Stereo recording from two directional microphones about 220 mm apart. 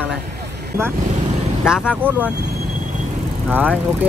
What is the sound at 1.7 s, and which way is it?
Speech, 5° right (ahead or behind).